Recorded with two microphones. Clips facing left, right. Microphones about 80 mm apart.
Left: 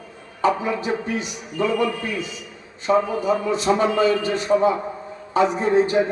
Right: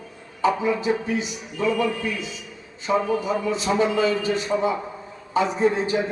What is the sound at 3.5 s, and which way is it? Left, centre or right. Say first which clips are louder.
A man's voice: even; left.